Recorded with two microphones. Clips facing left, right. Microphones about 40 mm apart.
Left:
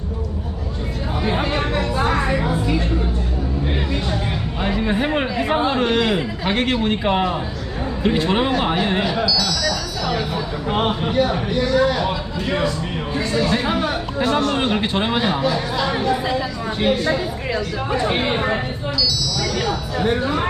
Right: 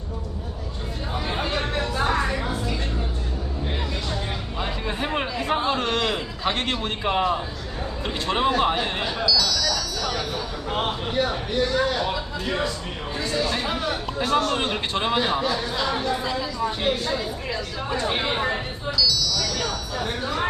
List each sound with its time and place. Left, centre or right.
1.2 s music: left
4.6 s a sound: centre
6.7 s speech: centre
9.2 s music: centre
10.1 s a sound: left
11.2 s speech: centre
13.3 s speech: centre
19.4 s a sound: centre
20.0 s speech: left